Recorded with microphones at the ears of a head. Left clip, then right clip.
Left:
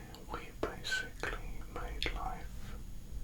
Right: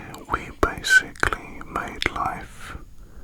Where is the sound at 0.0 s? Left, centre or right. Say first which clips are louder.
Right 17 dB; right.